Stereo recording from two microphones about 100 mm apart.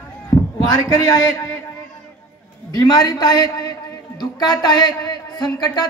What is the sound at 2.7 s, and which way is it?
A man's voice, 40° left (ahead or behind).